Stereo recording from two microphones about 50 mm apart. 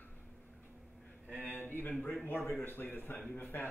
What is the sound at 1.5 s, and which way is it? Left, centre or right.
A man's voice, left.